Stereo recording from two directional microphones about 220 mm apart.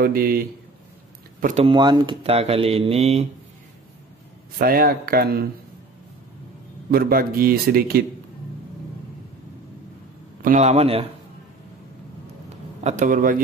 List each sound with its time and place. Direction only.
0.0 s speech: 40° right (ahead or behind)
1.4 s speech: 25° right (ahead or behind)
4.6 s speech: 40° right (ahead or behind)
6.9 s speech: 40° right (ahead or behind)
10.4 s speech: 35° right (ahead or behind)
12.8 s speech: 35° right (ahead or behind)